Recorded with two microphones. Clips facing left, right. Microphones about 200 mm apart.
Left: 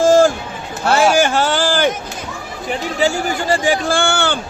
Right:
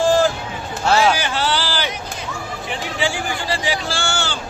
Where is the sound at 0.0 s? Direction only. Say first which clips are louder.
Left 5 dB; 45° left (ahead or behind).